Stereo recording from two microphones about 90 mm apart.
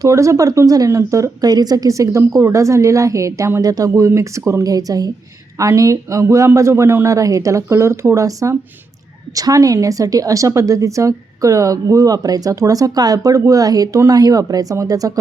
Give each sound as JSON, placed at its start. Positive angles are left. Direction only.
{"t": 0.0, "sound": "a woman's voice", "side_deg": -35}